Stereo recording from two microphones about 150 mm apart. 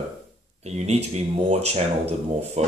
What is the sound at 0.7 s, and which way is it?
Speech, 45° right (ahead or behind).